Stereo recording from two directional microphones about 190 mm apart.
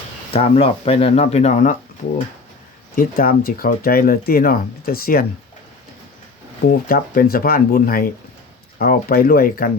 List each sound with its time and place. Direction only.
0.3 s speech: 30° left (ahead or behind)
2.9 s speech: 45° left (ahead or behind)
6.7 s speech: 50° left (ahead or behind)